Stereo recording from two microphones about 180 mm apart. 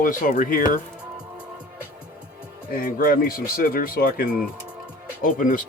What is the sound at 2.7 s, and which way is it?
Speech, 50° left (ahead or behind).